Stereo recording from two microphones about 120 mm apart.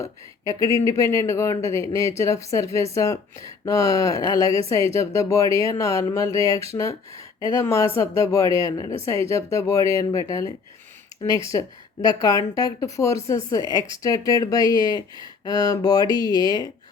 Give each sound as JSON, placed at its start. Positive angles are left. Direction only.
{"t": 0.0, "sound": "speech", "side_deg": 25}
{"t": 11.5, "sound": "speech", "side_deg": 30}